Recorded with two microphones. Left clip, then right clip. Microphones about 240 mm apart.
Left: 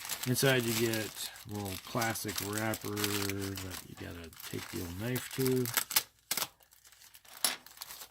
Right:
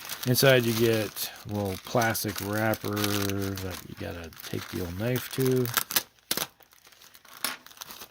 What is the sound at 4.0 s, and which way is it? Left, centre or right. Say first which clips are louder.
Speech: right 8 dB; right.